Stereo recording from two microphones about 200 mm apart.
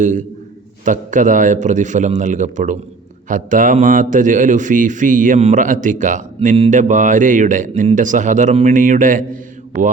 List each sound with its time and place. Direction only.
0.0 s speech: 40° right (ahead or behind)